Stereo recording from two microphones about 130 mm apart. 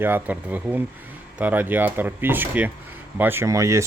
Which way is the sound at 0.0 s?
15° right (ahead or behind).